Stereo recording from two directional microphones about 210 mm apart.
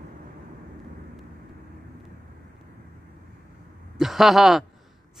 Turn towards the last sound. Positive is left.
turn(degrees=0)  # may be behind; listen again after turning